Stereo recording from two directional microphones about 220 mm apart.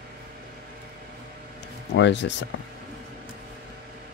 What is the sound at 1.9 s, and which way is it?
Speech, 55° left (ahead or behind).